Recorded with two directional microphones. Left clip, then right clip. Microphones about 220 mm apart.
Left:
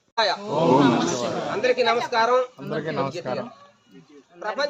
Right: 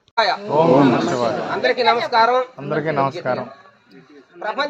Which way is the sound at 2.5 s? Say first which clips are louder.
Right 7 dB; 40° right (ahead or behind).